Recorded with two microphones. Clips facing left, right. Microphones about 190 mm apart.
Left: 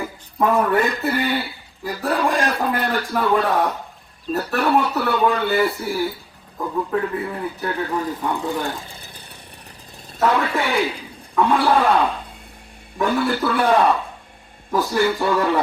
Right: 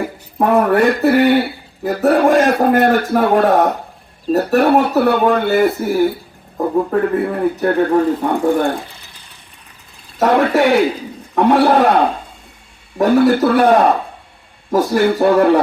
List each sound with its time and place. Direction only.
0.4 s speech: 60° right (ahead or behind)
10.2 s speech: 50° right (ahead or behind)
11.3 s speech: 65° right (ahead or behind)